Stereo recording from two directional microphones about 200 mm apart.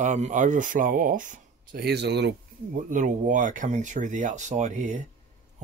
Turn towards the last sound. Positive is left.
turn(degrees=-35)  # may be behind; listen again after turning